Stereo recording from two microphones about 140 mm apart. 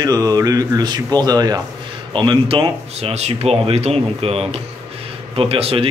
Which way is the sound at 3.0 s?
50° right (ahead or behind).